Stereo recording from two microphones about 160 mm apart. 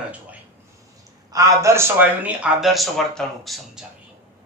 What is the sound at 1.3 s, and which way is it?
A man's voice, 20° right (ahead or behind).